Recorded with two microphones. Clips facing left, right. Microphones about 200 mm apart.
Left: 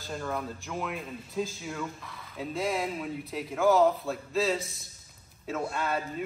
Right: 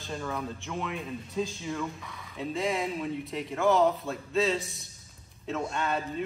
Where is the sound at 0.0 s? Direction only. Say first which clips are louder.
Even; centre (ahead or behind).